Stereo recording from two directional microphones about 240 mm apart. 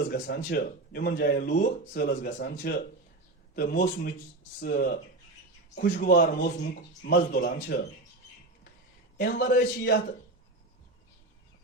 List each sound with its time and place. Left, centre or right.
0.1 s a man's voice: left
9.1 s a man's voice: left